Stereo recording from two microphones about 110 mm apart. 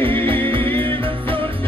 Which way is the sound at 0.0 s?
55° right (ahead or behind).